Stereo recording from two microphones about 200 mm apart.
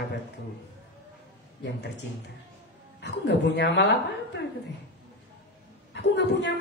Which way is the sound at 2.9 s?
60° left (ahead or behind).